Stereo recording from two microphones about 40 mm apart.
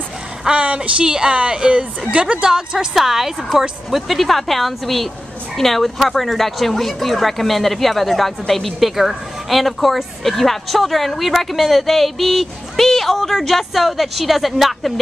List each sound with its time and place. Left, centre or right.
0.5 s a woman's voice: right
2.9 s a woman's voice: centre